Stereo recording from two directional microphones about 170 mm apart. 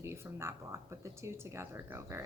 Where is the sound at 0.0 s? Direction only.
15° right (ahead or behind).